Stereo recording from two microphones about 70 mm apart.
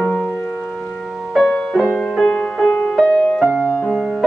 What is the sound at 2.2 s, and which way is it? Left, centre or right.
Music, centre.